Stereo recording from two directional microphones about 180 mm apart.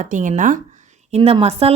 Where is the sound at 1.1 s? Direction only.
30° right (ahead or behind).